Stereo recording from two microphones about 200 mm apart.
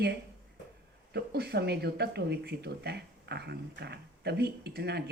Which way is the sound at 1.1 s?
55° right (ahead or behind).